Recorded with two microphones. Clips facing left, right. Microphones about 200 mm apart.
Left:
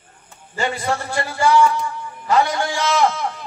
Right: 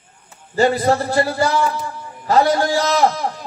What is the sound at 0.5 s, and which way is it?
A man's voice, 35° right (ahead or behind).